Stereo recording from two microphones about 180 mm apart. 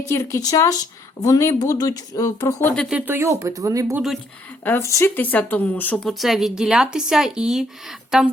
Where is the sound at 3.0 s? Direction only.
15° right (ahead or behind).